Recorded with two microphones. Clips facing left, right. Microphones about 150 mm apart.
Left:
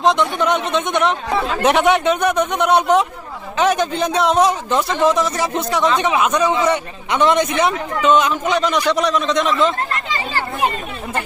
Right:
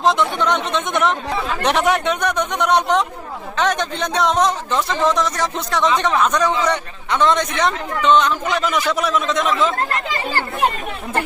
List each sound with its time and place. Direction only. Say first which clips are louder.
0.0 s a man's voice: left 1 dB; centre (ahead or behind)